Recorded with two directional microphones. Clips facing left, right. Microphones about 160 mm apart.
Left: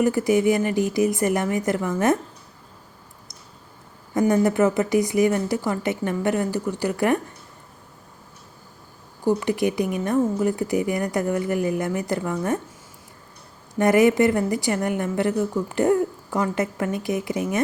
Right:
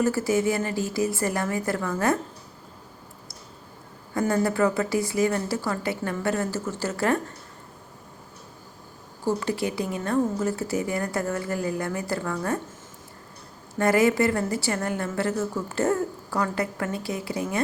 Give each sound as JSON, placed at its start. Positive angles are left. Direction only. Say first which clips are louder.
{"t": 0.0, "sound": "speech", "louder": "left 4 dB", "side_deg": 15}
{"t": 4.1, "sound": "a woman's voice", "louder": "left 5 dB", "side_deg": 20}
{"t": 9.2, "sound": "a woman's voice", "louder": "left 5 dB", "side_deg": 15}
{"t": 13.7, "sound": "a woman's voice", "louder": "left 4 dB", "side_deg": 20}